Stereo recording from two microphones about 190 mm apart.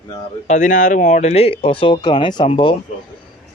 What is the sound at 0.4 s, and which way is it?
Speech, 40° left (ahead or behind).